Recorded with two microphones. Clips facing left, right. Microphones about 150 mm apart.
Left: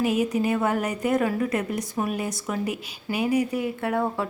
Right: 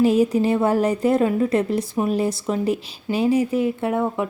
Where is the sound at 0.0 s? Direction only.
30° right (ahead or behind).